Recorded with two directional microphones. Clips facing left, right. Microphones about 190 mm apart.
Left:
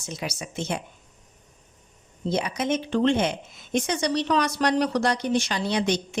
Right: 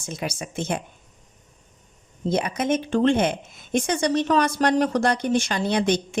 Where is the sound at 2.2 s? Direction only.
50° right (ahead or behind).